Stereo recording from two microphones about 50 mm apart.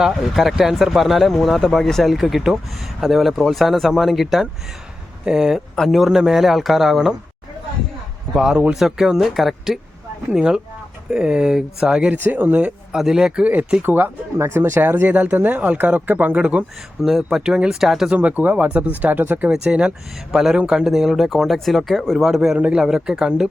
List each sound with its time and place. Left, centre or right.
0.1 s speech: centre
8.4 s speech: centre
10.3 s speech: centre
12.0 s speech: right
12.9 s speech: centre
13.4 s speech: right
15.1 s speech: right
17.0 s speech: centre
17.4 s speech: centre
18.1 s speech: right
19.0 s speech: right
19.5 s speech: right
20.3 s speech: centre
22.8 s speech: centre